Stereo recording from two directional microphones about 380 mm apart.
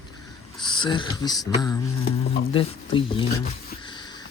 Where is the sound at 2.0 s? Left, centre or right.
Left.